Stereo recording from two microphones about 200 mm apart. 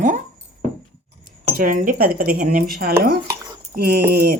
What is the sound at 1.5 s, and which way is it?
Speech, 45° right (ahead or behind).